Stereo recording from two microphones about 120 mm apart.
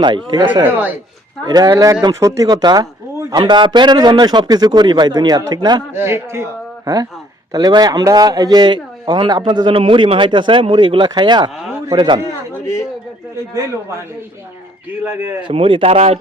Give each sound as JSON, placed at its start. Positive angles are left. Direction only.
{"t": 0.0, "sound": "a man's voice", "side_deg": -40}
{"t": 0.6, "sound": "a man's voice", "side_deg": -15}
{"t": 1.5, "sound": "a man's voice", "side_deg": -35}
{"t": 5.9, "sound": "a man's voice", "side_deg": -20}
{"t": 13.5, "sound": "a man's voice", "side_deg": -25}
{"t": 15.4, "sound": "speech", "side_deg": -45}